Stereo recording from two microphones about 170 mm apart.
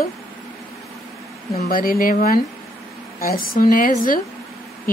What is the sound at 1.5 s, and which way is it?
Speech, 60° left (ahead or behind).